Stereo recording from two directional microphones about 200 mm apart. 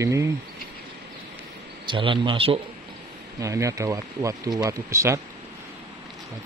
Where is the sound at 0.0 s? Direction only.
15° right (ahead or behind).